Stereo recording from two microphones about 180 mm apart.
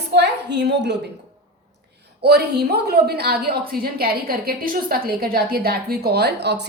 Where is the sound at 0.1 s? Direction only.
70° right (ahead or behind).